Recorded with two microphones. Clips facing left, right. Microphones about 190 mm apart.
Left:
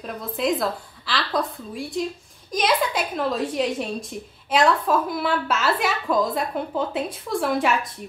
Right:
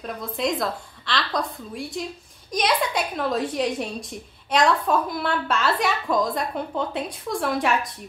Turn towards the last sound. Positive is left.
turn(degrees=0)  # may be behind; listen again after turning